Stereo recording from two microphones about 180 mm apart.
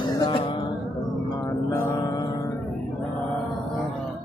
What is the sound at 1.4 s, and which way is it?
Music, 15° left (ahead or behind).